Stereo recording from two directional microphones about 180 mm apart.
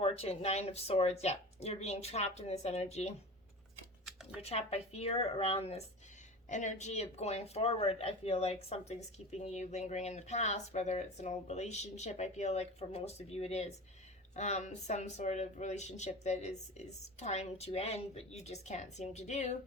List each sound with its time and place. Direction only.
0.0 s speech: 35° left (ahead or behind)
4.0 s a sound: centre (ahead or behind)
4.4 s speech: 35° left (ahead or behind)